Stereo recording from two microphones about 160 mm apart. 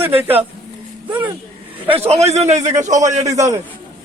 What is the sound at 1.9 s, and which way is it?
A man's voice, 40° right (ahead or behind).